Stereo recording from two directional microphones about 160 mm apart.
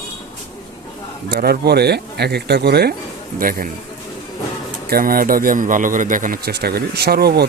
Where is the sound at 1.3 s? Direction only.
80° right.